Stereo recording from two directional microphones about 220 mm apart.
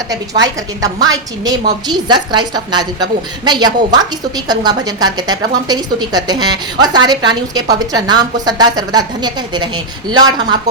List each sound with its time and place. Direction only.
0.4 s a woman's voice: 15° right (ahead or behind)